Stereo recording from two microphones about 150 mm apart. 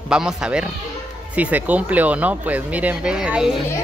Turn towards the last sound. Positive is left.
turn(degrees=-5)  # may be behind; listen again after turning